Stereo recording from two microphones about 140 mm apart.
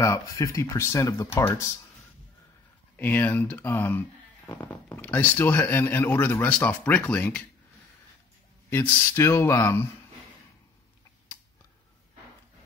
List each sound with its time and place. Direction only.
0.0 s speech: 25° left (ahead or behind)
3.0 s speech: 15° left (ahead or behind)
8.6 s speech: 15° left (ahead or behind)